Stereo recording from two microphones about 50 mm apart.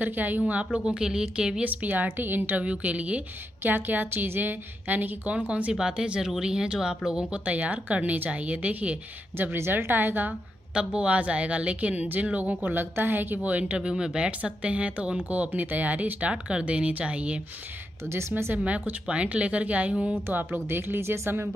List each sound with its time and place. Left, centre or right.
0.0 s a woman's voice: right
0.8 s speech: centre
1.6 s a woman's voice: right
2.6 s a woman's voice: right
3.6 s a woman's voice: right
5.5 s a woman's voice: right
7.4 s a woman's voice: right
9.7 s a woman's voice: right
10.7 s a woman's voice: right
13.4 s a woman's voice: right
13.7 s a woman's voice: centre
18.6 s a woman's voice: right
20.3 s a woman's voice: right